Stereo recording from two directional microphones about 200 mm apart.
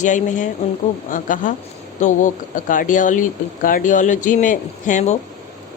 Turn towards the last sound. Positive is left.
turn(degrees=35)  # may be behind; listen again after turning